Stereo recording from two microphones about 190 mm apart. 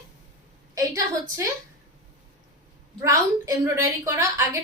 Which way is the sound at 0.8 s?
15° right (ahead or behind).